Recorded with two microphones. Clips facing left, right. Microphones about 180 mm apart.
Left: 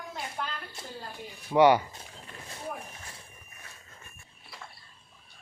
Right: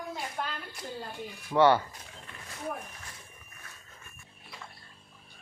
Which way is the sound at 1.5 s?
15° left (ahead or behind).